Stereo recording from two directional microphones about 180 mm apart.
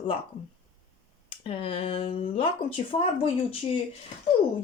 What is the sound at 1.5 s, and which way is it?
A woman's voice, 30° left (ahead or behind).